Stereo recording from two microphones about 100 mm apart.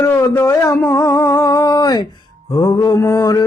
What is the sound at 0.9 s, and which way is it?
Music, 35° left (ahead or behind).